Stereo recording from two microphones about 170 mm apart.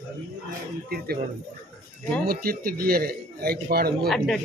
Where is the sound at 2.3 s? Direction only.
60° right (ahead or behind).